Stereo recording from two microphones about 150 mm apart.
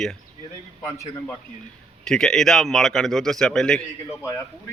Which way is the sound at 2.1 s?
5° left (ahead or behind).